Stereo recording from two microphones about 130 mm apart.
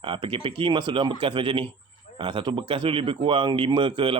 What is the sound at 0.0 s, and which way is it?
A man's voice, 40° right (ahead or behind).